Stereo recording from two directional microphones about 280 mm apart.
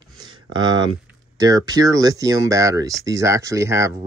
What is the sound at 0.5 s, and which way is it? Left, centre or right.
Speech, centre.